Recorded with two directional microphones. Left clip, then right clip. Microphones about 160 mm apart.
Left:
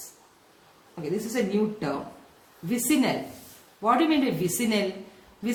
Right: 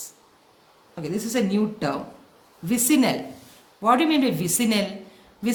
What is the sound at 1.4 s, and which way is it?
Speech, 55° right (ahead or behind).